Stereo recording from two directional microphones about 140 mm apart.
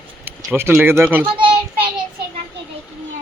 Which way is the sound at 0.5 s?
15° right (ahead or behind).